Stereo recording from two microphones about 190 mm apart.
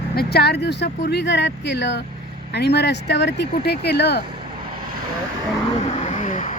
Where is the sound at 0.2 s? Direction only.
55° left (ahead or behind).